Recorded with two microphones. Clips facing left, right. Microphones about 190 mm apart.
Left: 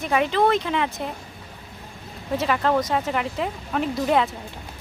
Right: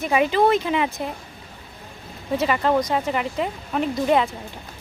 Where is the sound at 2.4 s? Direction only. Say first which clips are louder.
Right 1 dB; 5° right (ahead or behind).